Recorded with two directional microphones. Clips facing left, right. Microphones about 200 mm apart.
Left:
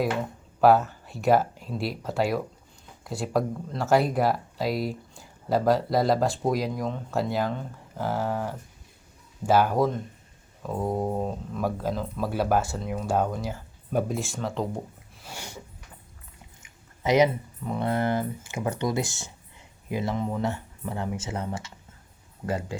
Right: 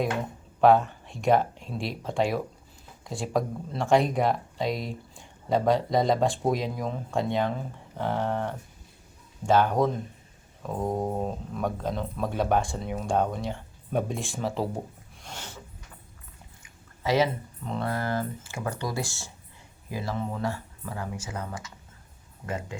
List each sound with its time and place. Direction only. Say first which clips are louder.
0.6 s speech: even; 5° left (ahead or behind)
15.2 s snort: left 1 dB; 10° left (ahead or behind)
16.6 s a sound: left 2 dB; 20° left (ahead or behind)
17.6 s speech: left 2 dB; 10° left (ahead or behind)
17.8 s speech: left 4 dB; 20° left (ahead or behind)